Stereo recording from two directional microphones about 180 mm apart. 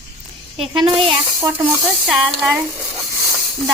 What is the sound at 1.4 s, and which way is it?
Speech, 10° right (ahead or behind).